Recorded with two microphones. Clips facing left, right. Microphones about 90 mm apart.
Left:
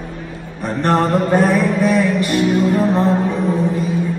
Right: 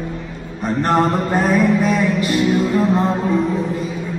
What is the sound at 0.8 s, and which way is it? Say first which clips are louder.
Music: left 2 dB; 15° right (ahead or behind).